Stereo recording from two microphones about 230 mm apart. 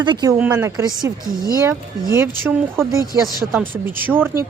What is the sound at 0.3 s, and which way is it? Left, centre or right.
Speech, centre.